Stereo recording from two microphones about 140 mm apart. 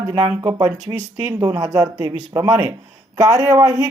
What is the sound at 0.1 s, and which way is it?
Speech, 30° right (ahead or behind).